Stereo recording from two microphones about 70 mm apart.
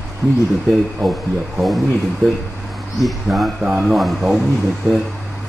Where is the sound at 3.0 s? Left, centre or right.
Centre.